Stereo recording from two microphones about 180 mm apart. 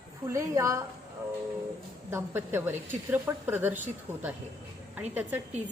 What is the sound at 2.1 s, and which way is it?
A woman's voice, 10° right (ahead or behind).